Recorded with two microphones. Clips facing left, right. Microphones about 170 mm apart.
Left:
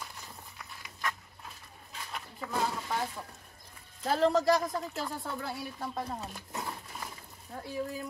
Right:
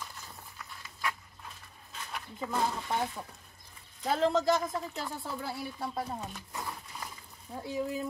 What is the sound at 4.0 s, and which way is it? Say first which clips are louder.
Speech: left 1 dB; centre (ahead or behind).